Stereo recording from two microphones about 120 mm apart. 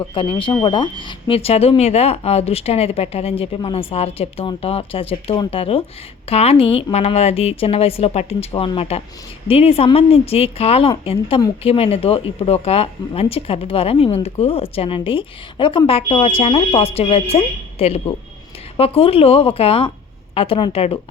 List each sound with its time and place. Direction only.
0.0 s a woman's voice: 40° left (ahead or behind)